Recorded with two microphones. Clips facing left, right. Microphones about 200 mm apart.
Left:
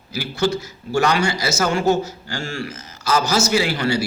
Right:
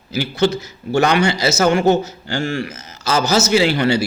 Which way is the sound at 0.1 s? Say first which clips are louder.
Right 4 dB; 20° right (ahead or behind).